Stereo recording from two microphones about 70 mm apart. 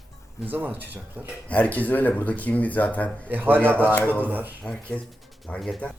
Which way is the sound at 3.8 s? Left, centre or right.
Left.